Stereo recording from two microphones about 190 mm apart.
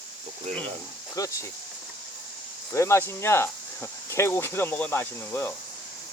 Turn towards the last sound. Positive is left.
turn(degrees=10)  # may be behind; listen again after turning